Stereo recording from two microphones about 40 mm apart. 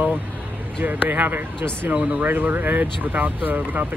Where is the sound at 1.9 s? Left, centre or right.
Right.